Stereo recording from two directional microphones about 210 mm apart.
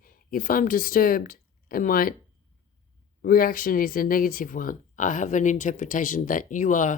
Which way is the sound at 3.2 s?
40° left (ahead or behind).